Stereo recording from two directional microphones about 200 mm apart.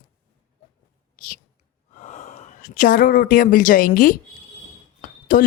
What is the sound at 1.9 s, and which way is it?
Speech, 40° left (ahead or behind).